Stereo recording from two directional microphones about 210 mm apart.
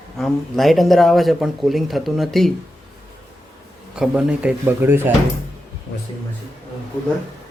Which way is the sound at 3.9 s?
5° right (ahead or behind).